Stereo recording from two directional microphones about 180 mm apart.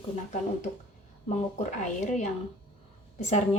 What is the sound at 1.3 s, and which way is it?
A woman's voice, 40° left (ahead or behind).